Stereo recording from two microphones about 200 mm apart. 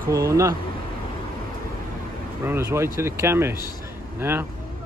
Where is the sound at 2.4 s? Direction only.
10° right (ahead or behind).